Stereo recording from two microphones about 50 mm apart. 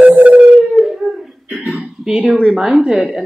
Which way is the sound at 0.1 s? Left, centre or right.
Right.